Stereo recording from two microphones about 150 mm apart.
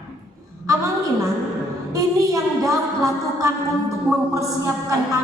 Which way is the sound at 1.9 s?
25° right (ahead or behind).